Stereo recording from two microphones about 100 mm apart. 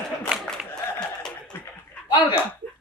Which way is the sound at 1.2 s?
10° left (ahead or behind).